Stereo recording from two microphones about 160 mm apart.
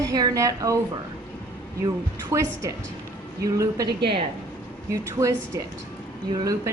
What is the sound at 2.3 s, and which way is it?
Speech, 20° right (ahead or behind).